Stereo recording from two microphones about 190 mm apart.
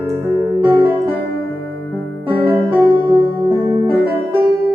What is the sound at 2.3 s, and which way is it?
Music, 10° right (ahead or behind).